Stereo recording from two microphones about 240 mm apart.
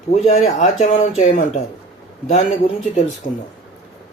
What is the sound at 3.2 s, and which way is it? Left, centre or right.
Speech, left.